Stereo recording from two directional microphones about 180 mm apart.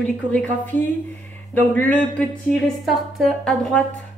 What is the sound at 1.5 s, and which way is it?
A woman's voice, 10° left (ahead or behind).